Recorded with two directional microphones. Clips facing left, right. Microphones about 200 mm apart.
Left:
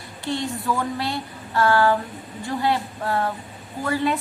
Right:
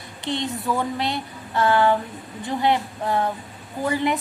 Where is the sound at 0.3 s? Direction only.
20° right (ahead or behind).